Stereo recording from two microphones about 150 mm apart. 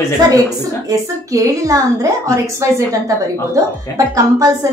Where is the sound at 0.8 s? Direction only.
20° right (ahead or behind).